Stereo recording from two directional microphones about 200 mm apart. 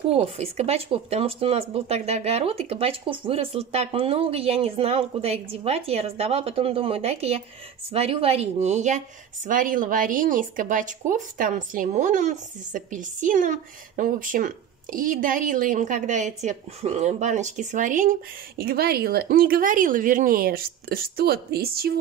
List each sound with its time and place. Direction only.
0.1 s speech: 30° right (ahead or behind); by 21.9 s 50° right (ahead or behind)